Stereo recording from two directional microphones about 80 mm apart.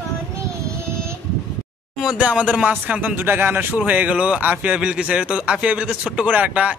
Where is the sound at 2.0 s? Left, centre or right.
Centre.